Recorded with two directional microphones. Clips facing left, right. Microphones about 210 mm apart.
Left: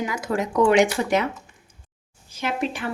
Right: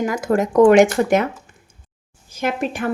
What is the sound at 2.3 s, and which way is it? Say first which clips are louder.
Speech: right 4 dB; 50° right (ahead or behind).